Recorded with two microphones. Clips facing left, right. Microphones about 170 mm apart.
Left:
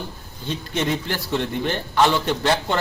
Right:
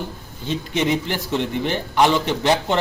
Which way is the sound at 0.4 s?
15° right (ahead or behind).